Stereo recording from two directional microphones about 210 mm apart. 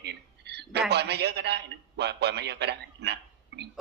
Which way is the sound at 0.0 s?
50° right (ahead or behind).